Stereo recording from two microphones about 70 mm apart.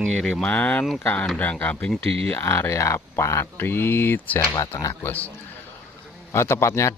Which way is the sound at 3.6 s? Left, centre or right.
Left.